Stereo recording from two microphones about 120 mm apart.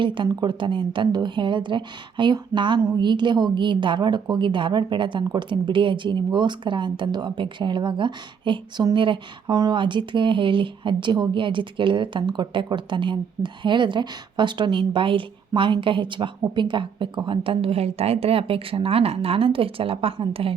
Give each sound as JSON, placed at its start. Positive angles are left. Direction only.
{"t": 0.0, "sound": "a woman's voice", "side_deg": -40}